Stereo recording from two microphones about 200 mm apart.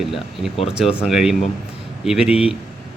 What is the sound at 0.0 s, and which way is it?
Speech, centre (ahead or behind).